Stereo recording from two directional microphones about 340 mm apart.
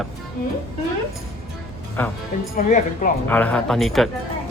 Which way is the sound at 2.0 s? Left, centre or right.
Centre.